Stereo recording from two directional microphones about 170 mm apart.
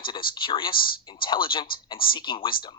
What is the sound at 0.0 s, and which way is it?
Speech, 30° left (ahead or behind).